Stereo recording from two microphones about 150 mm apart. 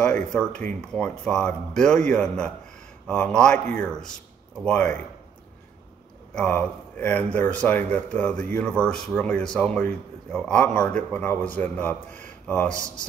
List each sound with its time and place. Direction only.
0.0 s speech: 5° left (ahead or behind)
6.3 s speech: 5° left (ahead or behind)
12.7 s speech: 20° right (ahead or behind)